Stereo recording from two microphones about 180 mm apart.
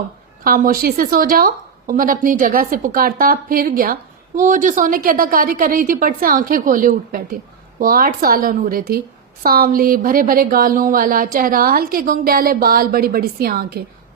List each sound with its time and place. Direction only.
0.4 s speech: 55° right (ahead or behind)